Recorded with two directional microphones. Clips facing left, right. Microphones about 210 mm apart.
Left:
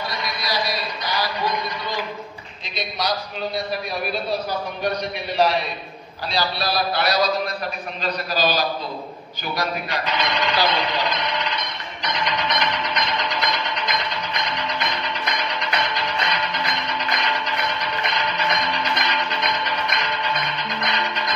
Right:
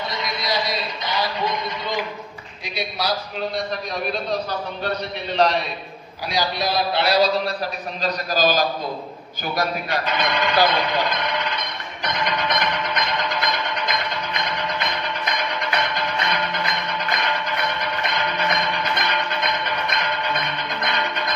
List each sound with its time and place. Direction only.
0.1 s a sound: 20° right (ahead or behind)
2.6 s a man's voice: 10° right (ahead or behind)
4.1 s a man's voice: 10° left (ahead or behind)
6.3 s a man's voice: 15° right (ahead or behind); by 7.5 s 30° right (ahead or behind)
8.0 s a man's voice: 45° right (ahead or behind)
9.6 s a sound: 50° right (ahead or behind)
14.7 s music: 55° right (ahead or behind)